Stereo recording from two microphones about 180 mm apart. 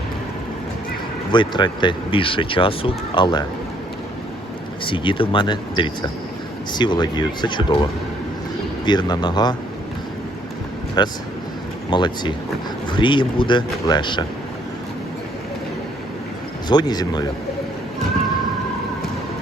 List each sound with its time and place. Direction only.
1.3 s speech: 25° left (ahead or behind)
4.9 s speech: 30° left (ahead or behind)
11.0 s speech: 25° left (ahead or behind)
16.6 s speech: 20° left (ahead or behind)